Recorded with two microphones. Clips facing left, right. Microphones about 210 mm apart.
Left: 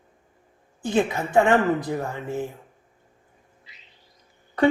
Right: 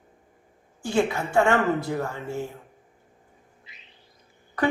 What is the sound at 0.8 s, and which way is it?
A woman's voice, 20° left (ahead or behind).